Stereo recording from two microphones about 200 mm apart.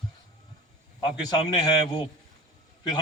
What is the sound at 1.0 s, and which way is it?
Speech, 20° left (ahead or behind).